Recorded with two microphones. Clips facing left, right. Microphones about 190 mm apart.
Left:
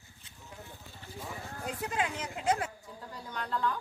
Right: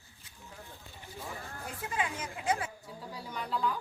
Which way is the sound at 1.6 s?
70° left (ahead or behind).